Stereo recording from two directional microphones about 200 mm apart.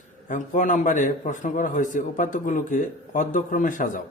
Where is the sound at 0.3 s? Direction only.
40° left (ahead or behind).